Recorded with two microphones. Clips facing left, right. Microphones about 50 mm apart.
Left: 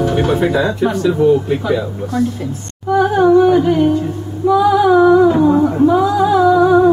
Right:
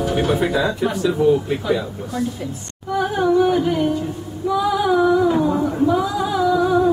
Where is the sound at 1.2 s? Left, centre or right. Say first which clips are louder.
Left 4 dB; centre.